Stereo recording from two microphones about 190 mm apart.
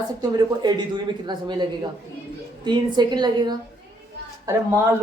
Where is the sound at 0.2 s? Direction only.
20° right (ahead or behind).